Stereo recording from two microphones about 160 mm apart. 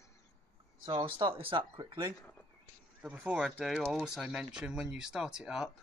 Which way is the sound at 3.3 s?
Centre (ahead or behind).